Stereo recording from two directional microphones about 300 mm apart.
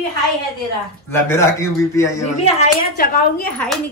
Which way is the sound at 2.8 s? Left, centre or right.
Left.